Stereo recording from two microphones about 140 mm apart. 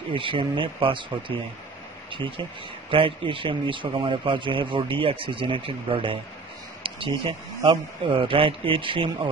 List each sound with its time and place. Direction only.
0.1 s a man's voice: 35° right (ahead or behind)